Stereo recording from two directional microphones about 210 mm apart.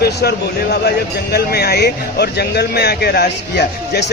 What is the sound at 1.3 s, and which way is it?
Speech, 50° left (ahead or behind).